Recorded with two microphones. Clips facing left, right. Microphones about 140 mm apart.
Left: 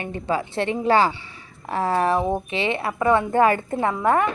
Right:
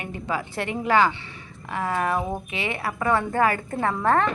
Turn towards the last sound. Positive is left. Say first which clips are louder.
# left 2 dB
turn(degrees=15)  # may be behind; listen again after turning